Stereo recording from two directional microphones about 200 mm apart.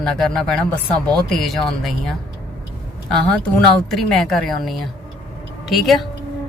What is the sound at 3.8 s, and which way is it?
Speech, centre (ahead or behind).